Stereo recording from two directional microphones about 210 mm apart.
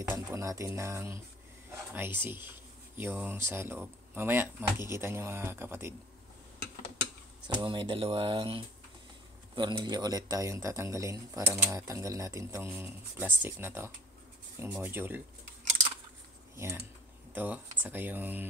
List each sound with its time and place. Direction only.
0.1 s speech: 15° right (ahead or behind)
7.4 s speech: 20° right (ahead or behind)
16.5 s speech: 10° right (ahead or behind)